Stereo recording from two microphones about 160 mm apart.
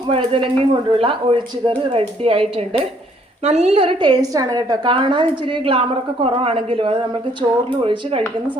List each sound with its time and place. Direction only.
0.1 s a woman's voice: 30° right (ahead or behind)